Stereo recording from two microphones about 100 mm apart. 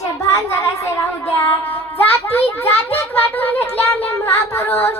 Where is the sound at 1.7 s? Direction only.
20° left (ahead or behind).